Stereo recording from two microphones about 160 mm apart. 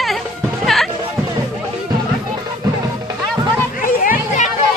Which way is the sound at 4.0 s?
55° left (ahead or behind).